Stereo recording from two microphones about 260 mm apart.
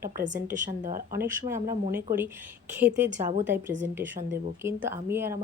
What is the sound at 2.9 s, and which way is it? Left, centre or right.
Speech, right.